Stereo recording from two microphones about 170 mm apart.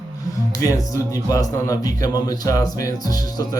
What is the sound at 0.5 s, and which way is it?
Speech, 20° left (ahead or behind).